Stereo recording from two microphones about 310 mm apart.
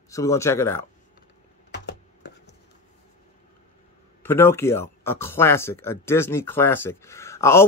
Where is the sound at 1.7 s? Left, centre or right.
Left.